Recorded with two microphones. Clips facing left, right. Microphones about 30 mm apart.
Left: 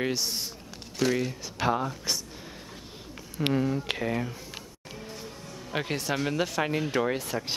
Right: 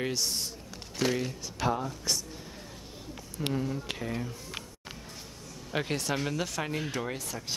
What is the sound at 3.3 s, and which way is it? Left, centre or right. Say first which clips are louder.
Speech: left 6 dB; left.